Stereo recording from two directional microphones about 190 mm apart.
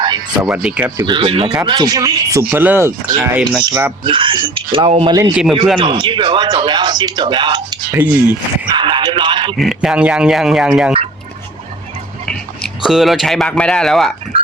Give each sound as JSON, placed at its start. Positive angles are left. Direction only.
{"t": 0.0, "sound": "music", "side_deg": -20}
{"t": 0.4, "sound": "speech", "side_deg": -5}
{"t": 0.9, "sound": "speech", "side_deg": -20}
{"t": 5.3, "sound": "speech", "side_deg": -5}
{"t": 5.7, "sound": "speech", "side_deg": -25}
{"t": 7.9, "sound": "speech", "side_deg": -10}
{"t": 8.7, "sound": "a sound", "side_deg": -25}
{"t": 9.6, "sound": "speech", "side_deg": 0}
{"t": 12.3, "sound": "speech", "side_deg": 0}